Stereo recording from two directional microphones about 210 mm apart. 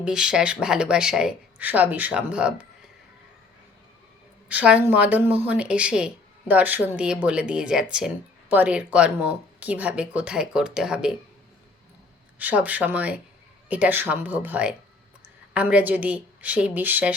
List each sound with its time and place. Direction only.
0.0 s speech: 5° right (ahead or behind)
4.4 s speech: 5° right (ahead or behind)
12.4 s a woman's voice: 5° right (ahead or behind)